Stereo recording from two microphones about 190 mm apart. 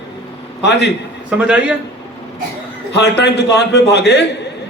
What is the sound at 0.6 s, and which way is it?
Speech, 65° left (ahead or behind).